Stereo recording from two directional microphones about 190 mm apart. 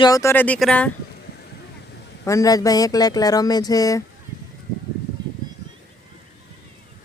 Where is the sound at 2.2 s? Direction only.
15° left (ahead or behind).